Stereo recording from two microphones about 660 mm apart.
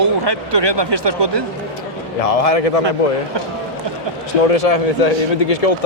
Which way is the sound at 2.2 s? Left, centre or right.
Left.